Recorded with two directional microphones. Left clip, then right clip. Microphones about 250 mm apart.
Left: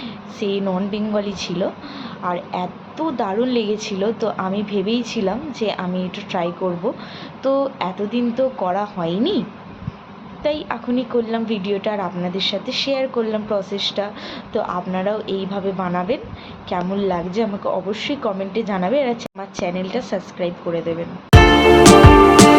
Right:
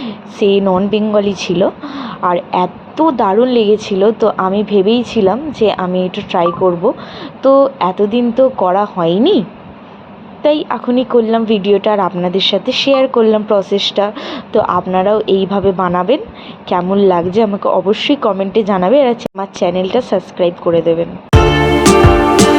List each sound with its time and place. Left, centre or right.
0.0 s a woman's voice: right
10.4 s a woman's voice: right